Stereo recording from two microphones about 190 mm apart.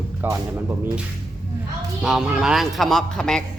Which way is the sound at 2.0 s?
5° right (ahead or behind).